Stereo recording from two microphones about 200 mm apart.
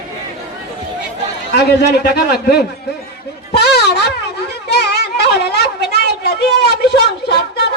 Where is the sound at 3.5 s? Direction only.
55° left (ahead or behind).